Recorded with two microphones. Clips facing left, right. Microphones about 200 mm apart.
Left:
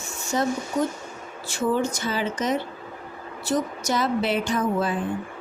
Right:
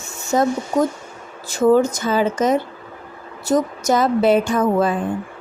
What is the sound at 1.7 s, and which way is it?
Speech, 40° right (ahead or behind).